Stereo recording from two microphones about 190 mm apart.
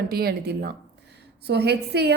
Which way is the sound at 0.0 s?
55° right (ahead or behind).